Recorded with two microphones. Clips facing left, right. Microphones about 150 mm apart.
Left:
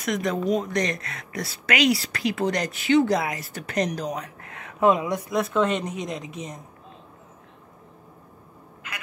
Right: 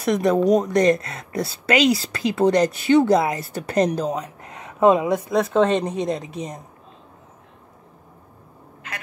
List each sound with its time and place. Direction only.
0.0 s a woman's voice: 35° right (ahead or behind)